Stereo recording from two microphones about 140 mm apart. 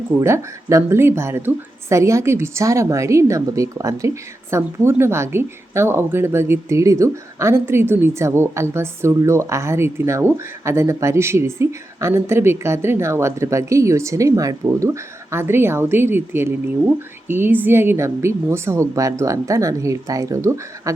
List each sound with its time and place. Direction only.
0.2 s speech: 20° right (ahead or behind)